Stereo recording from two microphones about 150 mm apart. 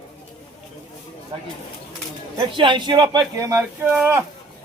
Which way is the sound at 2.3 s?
30° right (ahead or behind).